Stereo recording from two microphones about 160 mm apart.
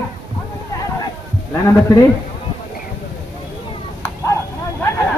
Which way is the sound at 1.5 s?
20° left (ahead or behind).